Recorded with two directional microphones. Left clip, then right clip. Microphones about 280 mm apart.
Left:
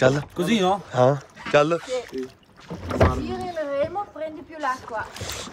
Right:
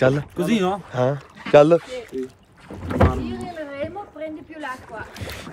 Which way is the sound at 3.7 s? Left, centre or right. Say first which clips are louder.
Left 5 dB; left.